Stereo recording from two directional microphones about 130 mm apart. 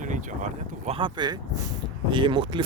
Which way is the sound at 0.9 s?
40° right (ahead or behind).